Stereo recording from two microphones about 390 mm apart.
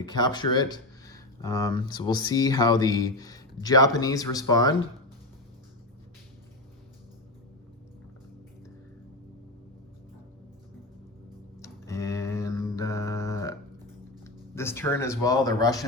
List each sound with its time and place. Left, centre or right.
0.0 s speech: centre
11.6 s mantra: centre
14.3 s speech: centre